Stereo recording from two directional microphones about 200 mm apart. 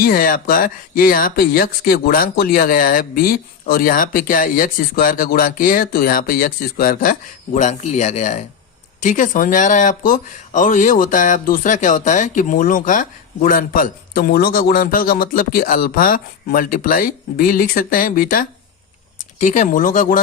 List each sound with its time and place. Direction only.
0.0 s speech: 45° left (ahead or behind)